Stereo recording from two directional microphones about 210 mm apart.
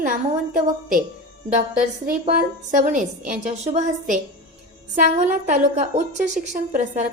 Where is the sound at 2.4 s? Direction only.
35° right (ahead or behind).